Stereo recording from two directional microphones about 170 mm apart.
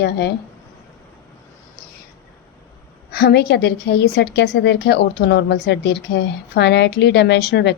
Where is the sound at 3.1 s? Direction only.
75° left (ahead or behind).